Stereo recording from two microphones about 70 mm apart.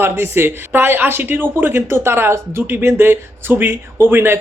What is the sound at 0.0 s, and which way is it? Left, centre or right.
Speech, right.